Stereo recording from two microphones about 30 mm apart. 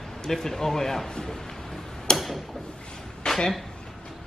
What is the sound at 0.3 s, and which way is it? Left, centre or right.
Speech, centre.